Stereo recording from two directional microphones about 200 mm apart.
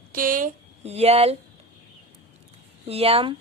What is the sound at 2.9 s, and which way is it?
Speech, 30° right (ahead or behind).